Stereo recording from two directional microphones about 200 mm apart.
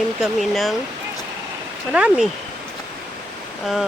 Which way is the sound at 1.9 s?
5° right (ahead or behind).